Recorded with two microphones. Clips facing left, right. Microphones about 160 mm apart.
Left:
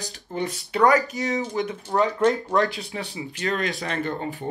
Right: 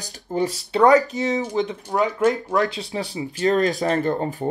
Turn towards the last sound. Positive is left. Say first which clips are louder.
# right 6 dB
turn(degrees=-40)  # may be behind; listen again after turning